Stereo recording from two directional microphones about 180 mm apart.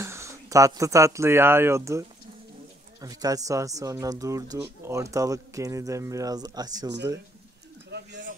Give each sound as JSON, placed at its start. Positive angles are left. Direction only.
{"t": 0.0, "sound": "speech", "side_deg": -15}
{"t": 7.9, "sound": "bird", "side_deg": -70}